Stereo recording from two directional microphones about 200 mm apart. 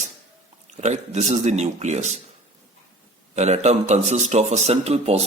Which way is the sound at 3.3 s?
35° right (ahead or behind).